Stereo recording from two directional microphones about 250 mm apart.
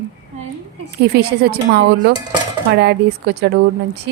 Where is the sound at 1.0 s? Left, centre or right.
Right.